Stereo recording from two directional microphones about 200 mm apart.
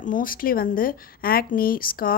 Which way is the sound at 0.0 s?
45° left (ahead or behind).